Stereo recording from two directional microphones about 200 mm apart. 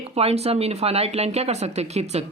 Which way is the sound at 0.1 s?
30° right (ahead or behind).